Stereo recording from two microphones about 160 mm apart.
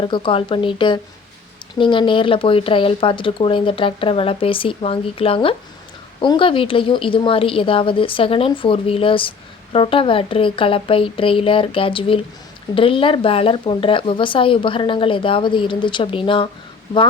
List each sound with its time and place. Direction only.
0.0 s speech: 30° left (ahead or behind)